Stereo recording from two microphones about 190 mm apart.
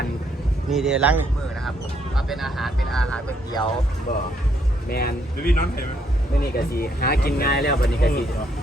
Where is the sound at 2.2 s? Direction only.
Centre (ahead or behind).